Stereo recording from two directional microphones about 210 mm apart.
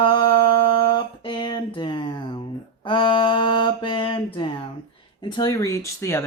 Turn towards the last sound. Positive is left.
turn(degrees=15)  # may be behind; listen again after turning